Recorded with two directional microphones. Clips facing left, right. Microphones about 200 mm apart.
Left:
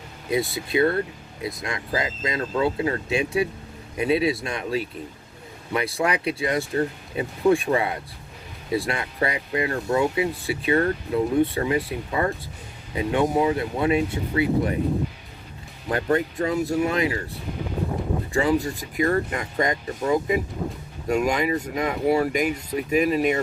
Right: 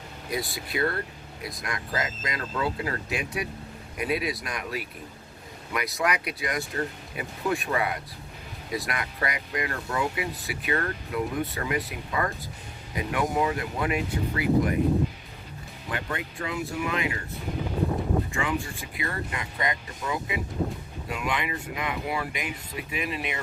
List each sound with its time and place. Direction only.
0.3 s speech: 25° left (ahead or behind)
15.9 s speech: 40° left (ahead or behind)